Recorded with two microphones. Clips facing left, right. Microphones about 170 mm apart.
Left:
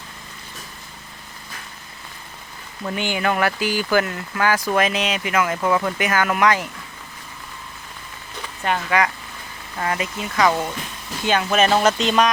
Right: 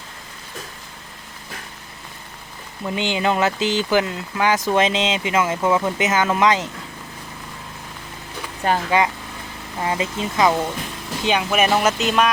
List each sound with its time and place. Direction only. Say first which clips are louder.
2.8 s speech: right 1 dB; 20° right (ahead or behind)
8.6 s speech: right 2 dB; 30° right (ahead or behind)
9.7 s speech: right 2 dB; 20° right (ahead or behind)
11.3 s speech: left 1 dB; 10° right (ahead or behind)